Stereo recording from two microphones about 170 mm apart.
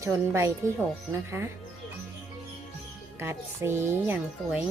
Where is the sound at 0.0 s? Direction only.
15° right (ahead or behind).